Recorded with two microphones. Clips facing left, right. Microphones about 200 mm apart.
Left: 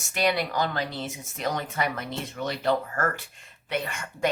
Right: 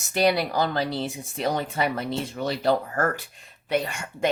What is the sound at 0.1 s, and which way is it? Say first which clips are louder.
Speech: right 4 dB; 35° right (ahead or behind).